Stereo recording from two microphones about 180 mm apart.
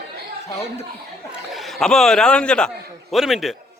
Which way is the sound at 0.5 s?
35° left (ahead or behind).